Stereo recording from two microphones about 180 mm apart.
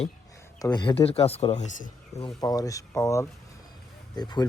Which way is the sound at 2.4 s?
20° left (ahead or behind).